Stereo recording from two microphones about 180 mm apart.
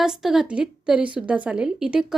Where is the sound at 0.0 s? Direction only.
Centre (ahead or behind).